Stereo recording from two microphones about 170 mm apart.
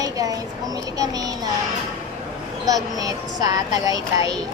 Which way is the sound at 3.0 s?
20° right (ahead or behind).